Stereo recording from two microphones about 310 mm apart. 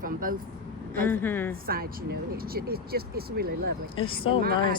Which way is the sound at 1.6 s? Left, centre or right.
Right.